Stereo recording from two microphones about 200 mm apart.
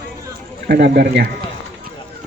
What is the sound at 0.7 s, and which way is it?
Speech, 55° right (ahead or behind).